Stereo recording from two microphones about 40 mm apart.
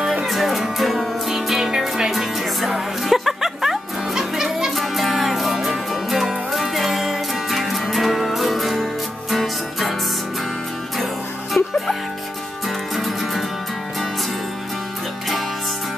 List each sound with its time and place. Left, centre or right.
0.3 s music: centre
11.6 s music: left
12.6 s music: centre